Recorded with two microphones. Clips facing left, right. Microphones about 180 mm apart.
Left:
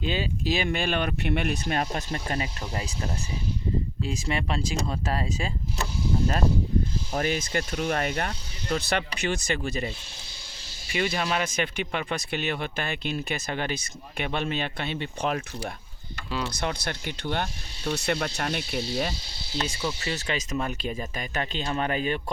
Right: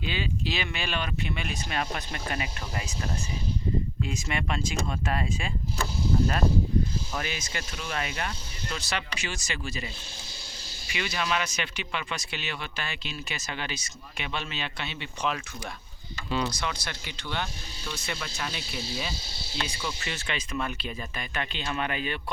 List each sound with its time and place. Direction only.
0.0 s speech: 40° left (ahead or behind)
4.0 s speech: 30° left (ahead or behind)
7.1 s speech: 45° left (ahead or behind)
10.9 s speech: 45° left (ahead or behind)
16.6 s speech: 55° left (ahead or behind)
19.8 s speech: 35° left (ahead or behind)